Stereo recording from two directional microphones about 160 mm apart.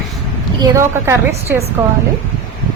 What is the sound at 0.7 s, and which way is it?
A woman's voice, 15° right (ahead or behind).